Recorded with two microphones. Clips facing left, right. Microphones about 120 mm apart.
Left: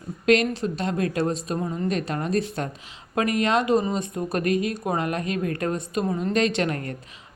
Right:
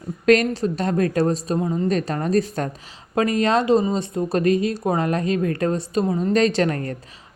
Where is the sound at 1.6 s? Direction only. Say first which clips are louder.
Right 5 dB; 20° right (ahead or behind).